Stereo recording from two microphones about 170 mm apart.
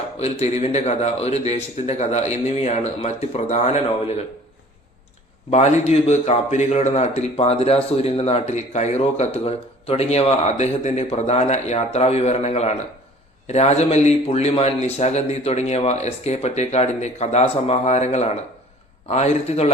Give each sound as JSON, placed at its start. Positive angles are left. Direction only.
{"t": 0.2, "sound": "a man's voice", "side_deg": 40}
{"t": 5.5, "sound": "a man's voice", "side_deg": 40}